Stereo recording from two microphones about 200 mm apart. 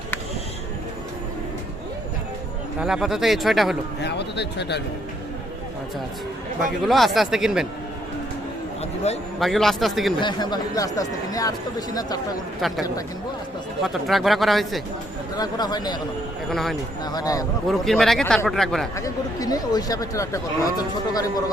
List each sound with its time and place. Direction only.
2.8 s speech: centre (ahead or behind)
4.0 s a man's voice: 60° left (ahead or behind)
6.8 s speech: centre (ahead or behind)
9.1 s a man's voice: 35° left (ahead or behind)
9.4 s speech: centre (ahead or behind)
10.2 s speech: 20° left (ahead or behind)
13.8 s speech: centre (ahead or behind)
15.4 s speech: 20° left (ahead or behind)
16.5 s speech: centre (ahead or behind)
17.1 s speech: 20° left (ahead or behind)
17.7 s speech: centre (ahead or behind)
18.9 s speech: 15° left (ahead or behind)